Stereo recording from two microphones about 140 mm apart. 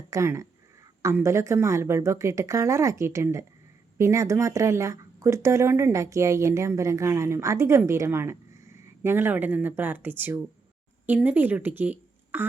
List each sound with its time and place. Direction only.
0.1 s a woman's voice: 20° right (ahead or behind)